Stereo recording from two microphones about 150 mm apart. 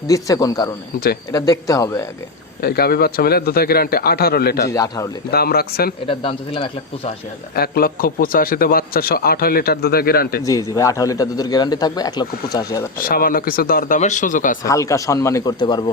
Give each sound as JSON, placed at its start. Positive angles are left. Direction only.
{"t": 0.1, "sound": "a man's voice", "side_deg": 25}
{"t": 2.6, "sound": "a man's voice", "side_deg": 90}
{"t": 4.7, "sound": "a man's voice", "side_deg": 25}
{"t": 5.3, "sound": "a man's voice", "side_deg": 90}
{"t": 6.1, "sound": "speech", "side_deg": 35}
{"t": 7.5, "sound": "a man's voice", "side_deg": 90}
{"t": 10.4, "sound": "a man's voice", "side_deg": 20}
{"t": 13.0, "sound": "speech", "side_deg": 75}
{"t": 14.6, "sound": "a man's voice", "side_deg": 20}